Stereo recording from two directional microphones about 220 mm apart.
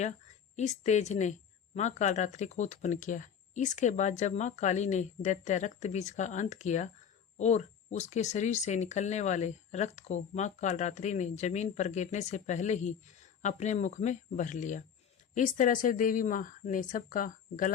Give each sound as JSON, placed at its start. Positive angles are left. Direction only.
{"t": 0.5, "sound": "speech", "side_deg": 30}